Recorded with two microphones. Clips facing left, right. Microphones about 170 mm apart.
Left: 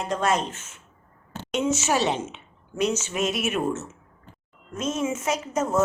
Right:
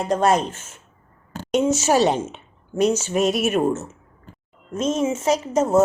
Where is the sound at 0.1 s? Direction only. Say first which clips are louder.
Right 6 dB; 40° right (ahead or behind).